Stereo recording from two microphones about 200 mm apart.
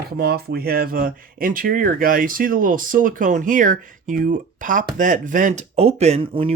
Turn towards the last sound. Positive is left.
turn(degrees=-25)  # may be behind; listen again after turning